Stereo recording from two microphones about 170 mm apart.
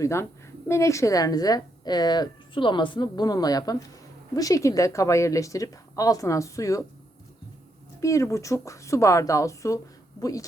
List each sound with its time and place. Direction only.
0.0 s a woman's voice: 15° left (ahead or behind)
8.0 s speech: 20° left (ahead or behind)